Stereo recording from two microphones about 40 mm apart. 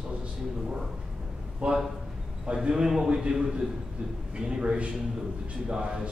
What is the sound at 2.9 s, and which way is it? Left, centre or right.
A man's voice, centre.